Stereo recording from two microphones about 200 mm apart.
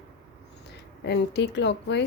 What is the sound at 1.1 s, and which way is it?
Speech, 60° left (ahead or behind).